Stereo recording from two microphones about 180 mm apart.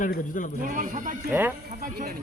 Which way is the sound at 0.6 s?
45° right (ahead or behind).